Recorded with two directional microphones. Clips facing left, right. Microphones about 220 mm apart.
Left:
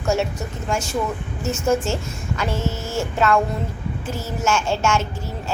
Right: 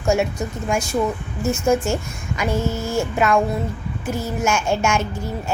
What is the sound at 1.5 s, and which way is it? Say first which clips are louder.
Speech: right 2 dB; 15° right (ahead or behind).